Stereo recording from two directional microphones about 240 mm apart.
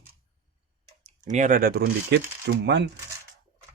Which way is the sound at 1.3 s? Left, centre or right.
Right.